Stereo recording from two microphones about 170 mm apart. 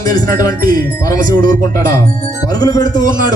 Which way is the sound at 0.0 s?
20° left (ahead or behind).